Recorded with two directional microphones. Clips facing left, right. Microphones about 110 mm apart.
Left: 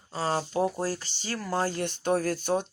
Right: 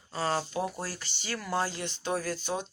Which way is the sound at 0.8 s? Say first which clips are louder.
Left 7 dB; 40° left (ahead or behind).